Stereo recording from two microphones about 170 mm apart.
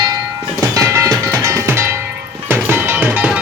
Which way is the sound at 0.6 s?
15° right (ahead or behind).